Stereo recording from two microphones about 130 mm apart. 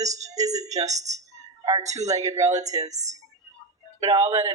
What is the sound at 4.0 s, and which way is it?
Speech, 30° right (ahead or behind).